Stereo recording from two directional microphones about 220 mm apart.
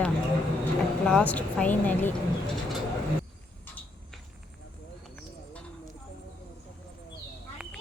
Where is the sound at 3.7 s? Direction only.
10° left (ahead or behind).